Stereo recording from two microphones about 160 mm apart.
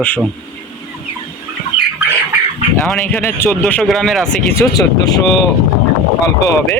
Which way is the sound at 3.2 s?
15° left (ahead or behind).